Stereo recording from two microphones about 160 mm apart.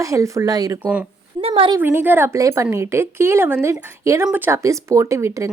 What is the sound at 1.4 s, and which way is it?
Speech, 40° right (ahead or behind).